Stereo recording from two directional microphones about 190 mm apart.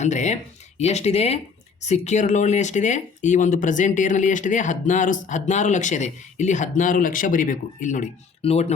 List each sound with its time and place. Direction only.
0.0 s speech: 40° left (ahead or behind)